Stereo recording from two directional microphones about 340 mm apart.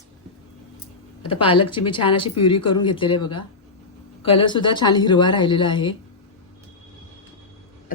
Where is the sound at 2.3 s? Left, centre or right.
Left.